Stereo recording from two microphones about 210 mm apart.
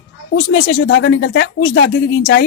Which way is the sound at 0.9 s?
55° left (ahead or behind).